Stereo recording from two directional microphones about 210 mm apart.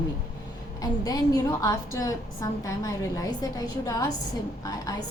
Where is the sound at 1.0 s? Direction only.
15° left (ahead or behind).